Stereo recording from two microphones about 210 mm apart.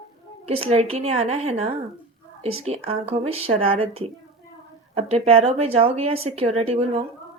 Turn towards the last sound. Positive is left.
turn(degrees=-30)  # may be behind; listen again after turning